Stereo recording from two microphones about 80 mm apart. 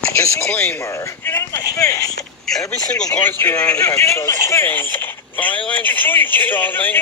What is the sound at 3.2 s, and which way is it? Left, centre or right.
Speech, left.